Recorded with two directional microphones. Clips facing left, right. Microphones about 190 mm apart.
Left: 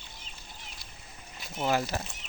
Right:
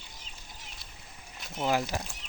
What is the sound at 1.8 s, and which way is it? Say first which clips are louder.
Speech: left 1 dB; centre (ahead or behind).